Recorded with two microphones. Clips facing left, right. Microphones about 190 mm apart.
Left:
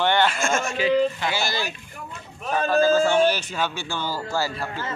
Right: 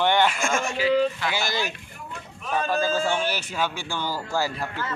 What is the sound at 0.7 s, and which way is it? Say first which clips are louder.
Speech: left 1 dB; 20° left (ahead or behind).